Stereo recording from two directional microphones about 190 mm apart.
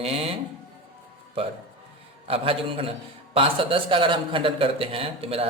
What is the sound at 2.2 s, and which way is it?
A man's voice, 30° right (ahead or behind).